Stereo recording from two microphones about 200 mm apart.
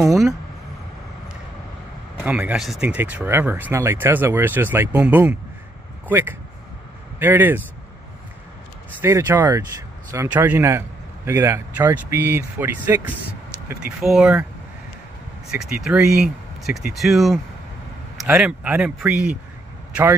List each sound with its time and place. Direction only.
0.0 s speech: centre (ahead or behind)
2.2 s speech: 10° right (ahead or behind)
9.0 s speech: 15° right (ahead or behind)
15.6 s speech: 5° right (ahead or behind)